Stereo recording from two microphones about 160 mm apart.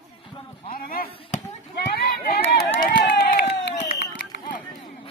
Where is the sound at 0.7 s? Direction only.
65° left (ahead or behind).